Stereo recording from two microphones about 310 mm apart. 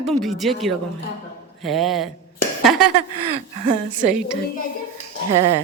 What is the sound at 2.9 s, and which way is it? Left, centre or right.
Speech, right.